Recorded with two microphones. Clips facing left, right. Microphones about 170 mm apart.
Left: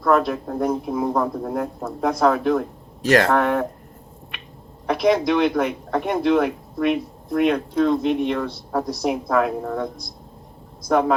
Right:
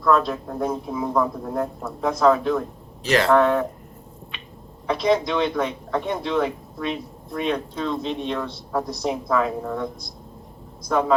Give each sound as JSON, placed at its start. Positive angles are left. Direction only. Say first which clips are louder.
{"t": 0.0, "sound": "speech", "louder": "left 1 dB", "side_deg": 55}
{"t": 4.9, "sound": "speech", "louder": "left 3 dB", "side_deg": 65}